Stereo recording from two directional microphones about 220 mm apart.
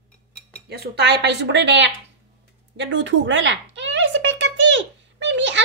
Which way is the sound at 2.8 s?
55° right (ahead or behind).